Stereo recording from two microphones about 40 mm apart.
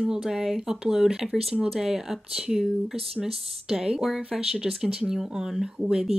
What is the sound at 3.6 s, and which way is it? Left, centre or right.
Speech, centre.